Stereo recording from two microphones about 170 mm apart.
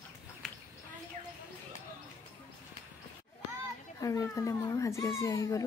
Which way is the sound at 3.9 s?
20° left (ahead or behind).